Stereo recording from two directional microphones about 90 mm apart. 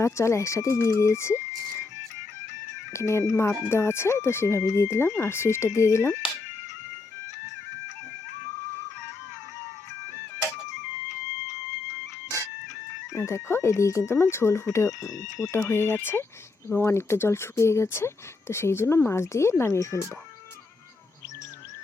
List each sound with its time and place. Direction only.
0.0 s speech: 30° left (ahead or behind)
2.9 s speech: 30° left (ahead or behind)
13.1 s speech: 30° left (ahead or behind)